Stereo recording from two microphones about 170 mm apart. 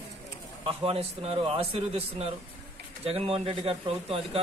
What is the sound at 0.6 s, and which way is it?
A man's voice, 35° right (ahead or behind).